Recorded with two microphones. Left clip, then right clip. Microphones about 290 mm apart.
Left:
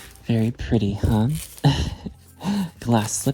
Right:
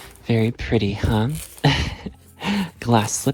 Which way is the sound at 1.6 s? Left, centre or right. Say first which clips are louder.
Right 4 dB; left.